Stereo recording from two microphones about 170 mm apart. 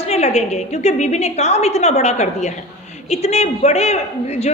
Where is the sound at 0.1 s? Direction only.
40° left (ahead or behind).